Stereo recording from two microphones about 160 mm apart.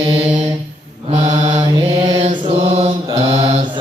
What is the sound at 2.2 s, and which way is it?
Mantra, 40° right (ahead or behind).